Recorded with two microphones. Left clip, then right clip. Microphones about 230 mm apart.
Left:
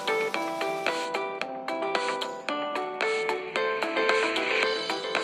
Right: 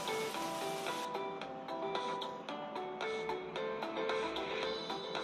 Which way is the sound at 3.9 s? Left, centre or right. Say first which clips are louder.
Left 13 dB; left.